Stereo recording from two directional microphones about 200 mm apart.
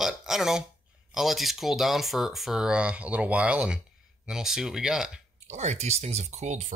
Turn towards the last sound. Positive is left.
turn(degrees=-35)  # may be behind; listen again after turning